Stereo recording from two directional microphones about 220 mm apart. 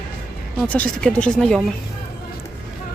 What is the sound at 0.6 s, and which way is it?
Speech, 5° left (ahead or behind).